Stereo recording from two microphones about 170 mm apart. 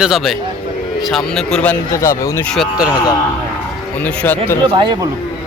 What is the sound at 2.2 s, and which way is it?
Speech, 15° left (ahead or behind).